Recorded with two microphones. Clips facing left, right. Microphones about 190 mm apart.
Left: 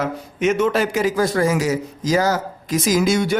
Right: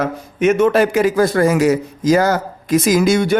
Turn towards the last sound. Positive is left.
turn(degrees=-55)  # may be behind; listen again after turning